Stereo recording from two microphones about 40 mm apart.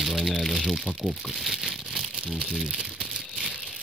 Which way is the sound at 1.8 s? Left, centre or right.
Centre.